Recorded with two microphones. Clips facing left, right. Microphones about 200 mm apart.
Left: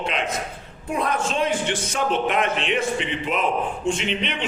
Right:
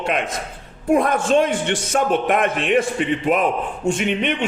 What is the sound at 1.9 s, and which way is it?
A man's voice, 50° right (ahead or behind).